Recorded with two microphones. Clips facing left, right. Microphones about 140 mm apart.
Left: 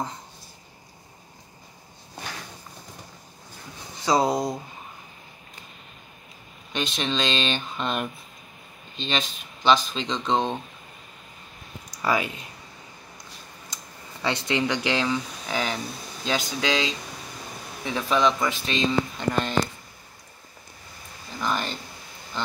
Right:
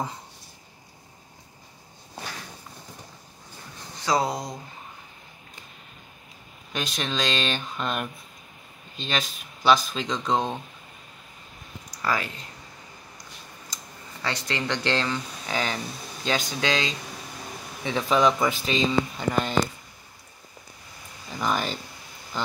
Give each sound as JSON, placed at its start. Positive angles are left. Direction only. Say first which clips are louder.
{"t": 4.0, "sound": "speech", "louder": "left 3 dB", "side_deg": 20}
{"t": 6.7, "sound": "speech", "louder": "left 2 dB", "side_deg": 0}
{"t": 12.0, "sound": "speech", "louder": "left 3 dB", "side_deg": 15}
{"t": 14.2, "sound": "speech", "louder": "left 4 dB", "side_deg": 15}
{"t": 18.0, "sound": "speech", "louder": "right 1 dB", "side_deg": -10}
{"t": 21.4, "sound": "speech", "louder": "right 1 dB", "side_deg": -5}